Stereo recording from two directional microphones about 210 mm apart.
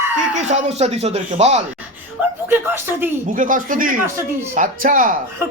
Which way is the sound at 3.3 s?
40° right (ahead or behind).